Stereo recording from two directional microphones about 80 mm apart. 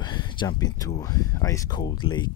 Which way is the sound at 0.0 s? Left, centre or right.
Left.